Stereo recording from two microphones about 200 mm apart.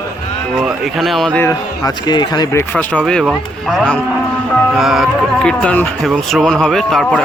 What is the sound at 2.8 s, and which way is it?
Speech, 5° left (ahead or behind).